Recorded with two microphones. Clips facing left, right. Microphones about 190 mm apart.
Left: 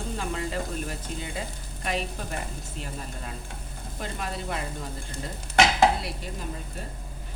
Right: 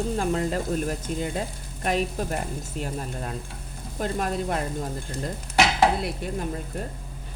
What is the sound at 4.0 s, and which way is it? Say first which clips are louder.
Speech: right 7 dB; 45° right (ahead or behind).